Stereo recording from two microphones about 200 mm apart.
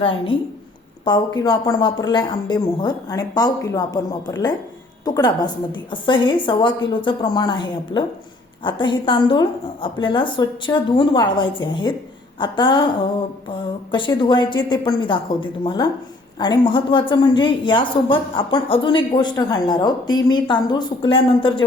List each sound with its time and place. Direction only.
0.0 s a woman's voice: 25° left (ahead or behind)